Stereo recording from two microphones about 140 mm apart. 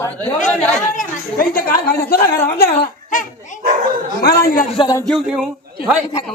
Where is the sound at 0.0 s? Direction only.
15° left (ahead or behind).